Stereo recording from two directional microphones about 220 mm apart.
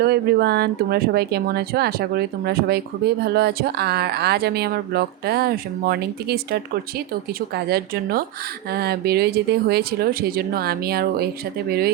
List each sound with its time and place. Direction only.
0.0 s speech: 45° right (ahead or behind)
8.7 s speech: 45° right (ahead or behind)